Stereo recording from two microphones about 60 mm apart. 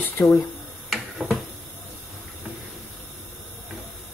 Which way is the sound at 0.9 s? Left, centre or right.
Centre.